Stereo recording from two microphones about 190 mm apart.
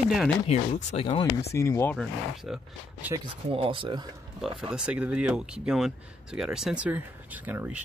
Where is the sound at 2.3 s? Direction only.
Centre (ahead or behind).